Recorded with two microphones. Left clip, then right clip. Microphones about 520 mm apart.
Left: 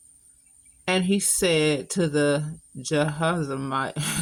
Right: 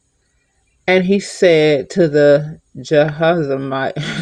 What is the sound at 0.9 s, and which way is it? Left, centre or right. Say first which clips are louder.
Speech: right 10 dB; left.